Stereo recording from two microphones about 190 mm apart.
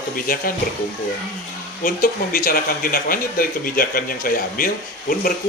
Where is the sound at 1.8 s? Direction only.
45° left (ahead or behind).